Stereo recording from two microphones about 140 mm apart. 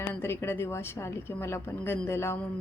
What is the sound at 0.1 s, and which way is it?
A woman's voice, 15° left (ahead or behind).